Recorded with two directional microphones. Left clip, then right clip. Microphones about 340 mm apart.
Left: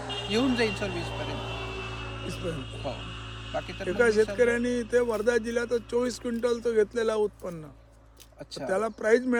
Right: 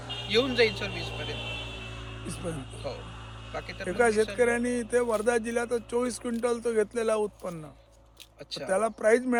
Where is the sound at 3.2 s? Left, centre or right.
Centre.